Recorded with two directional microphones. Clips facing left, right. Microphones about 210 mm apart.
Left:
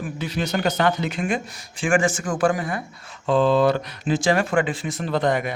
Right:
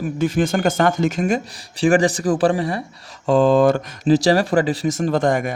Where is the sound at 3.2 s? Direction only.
45° right (ahead or behind).